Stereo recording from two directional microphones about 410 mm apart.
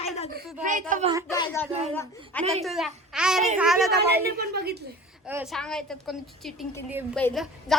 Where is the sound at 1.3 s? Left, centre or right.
Centre.